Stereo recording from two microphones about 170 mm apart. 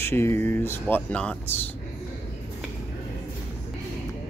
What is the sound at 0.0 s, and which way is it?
Speech, 15° left (ahead or behind).